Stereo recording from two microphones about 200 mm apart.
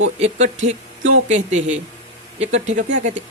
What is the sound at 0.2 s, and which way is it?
Speech, 35° right (ahead or behind).